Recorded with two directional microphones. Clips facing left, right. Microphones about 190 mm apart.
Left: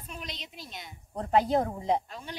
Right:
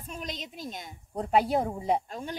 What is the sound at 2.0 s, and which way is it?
Speech, 45° right (ahead or behind).